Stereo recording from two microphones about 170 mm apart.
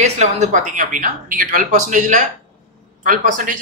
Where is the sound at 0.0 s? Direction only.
40° right (ahead or behind).